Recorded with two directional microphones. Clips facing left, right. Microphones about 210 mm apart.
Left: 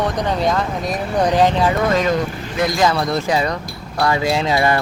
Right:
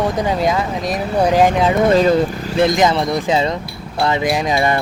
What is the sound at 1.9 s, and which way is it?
Speech, 30° right (ahead or behind).